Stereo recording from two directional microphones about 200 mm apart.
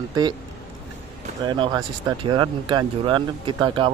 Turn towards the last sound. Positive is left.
turn(degrees=-25)  # may be behind; listen again after turning